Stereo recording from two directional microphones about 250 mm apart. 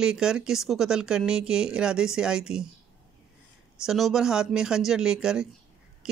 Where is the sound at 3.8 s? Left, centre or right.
Centre.